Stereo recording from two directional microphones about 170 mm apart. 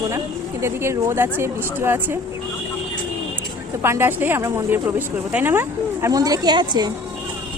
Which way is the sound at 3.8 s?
15° right (ahead or behind).